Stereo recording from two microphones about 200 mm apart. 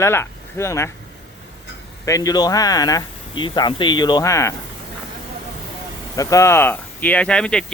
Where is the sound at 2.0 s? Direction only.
15° left (ahead or behind).